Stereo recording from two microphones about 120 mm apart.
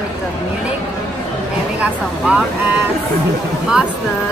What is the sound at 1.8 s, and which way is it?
Speech, 10° right (ahead or behind).